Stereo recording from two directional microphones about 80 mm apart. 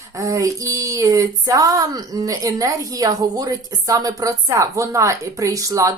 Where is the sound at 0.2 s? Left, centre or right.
Right.